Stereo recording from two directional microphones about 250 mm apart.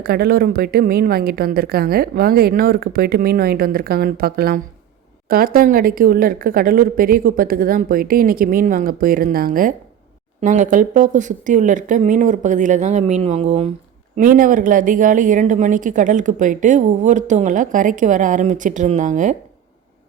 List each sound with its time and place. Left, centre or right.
0.0 s a woman's voice: right